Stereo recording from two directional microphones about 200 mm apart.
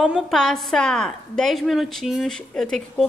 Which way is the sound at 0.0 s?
Centre (ahead or behind).